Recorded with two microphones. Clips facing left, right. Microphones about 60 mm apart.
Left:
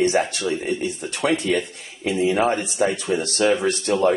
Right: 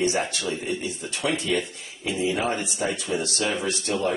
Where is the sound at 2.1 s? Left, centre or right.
Left.